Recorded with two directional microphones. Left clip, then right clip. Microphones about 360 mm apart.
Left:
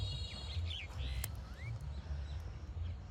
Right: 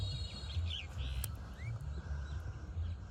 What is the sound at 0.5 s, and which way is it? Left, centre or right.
Bird, left.